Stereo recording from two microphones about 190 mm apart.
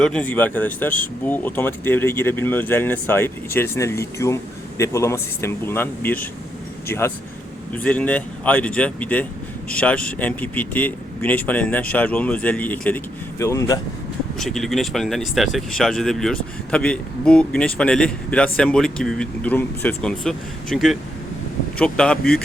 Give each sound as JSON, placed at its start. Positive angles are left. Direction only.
{"t": 0.0, "sound": "speech", "side_deg": 5}
{"t": 14.3, "sound": "speech", "side_deg": 0}